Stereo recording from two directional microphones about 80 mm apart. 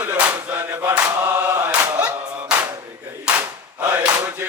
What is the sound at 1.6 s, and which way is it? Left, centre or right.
Choir, right.